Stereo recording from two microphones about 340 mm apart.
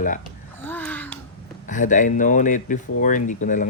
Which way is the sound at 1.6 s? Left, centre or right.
Left.